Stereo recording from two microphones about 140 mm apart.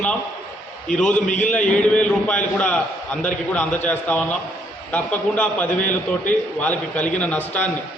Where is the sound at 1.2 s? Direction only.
60° left (ahead or behind).